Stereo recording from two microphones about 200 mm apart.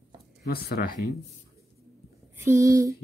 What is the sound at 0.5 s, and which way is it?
Speech, 50° left (ahead or behind).